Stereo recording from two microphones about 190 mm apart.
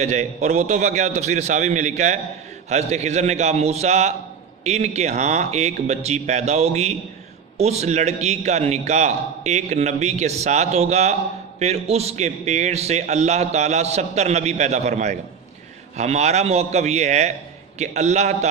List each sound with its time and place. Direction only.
0.0 s a man's voice: 35° right (ahead or behind)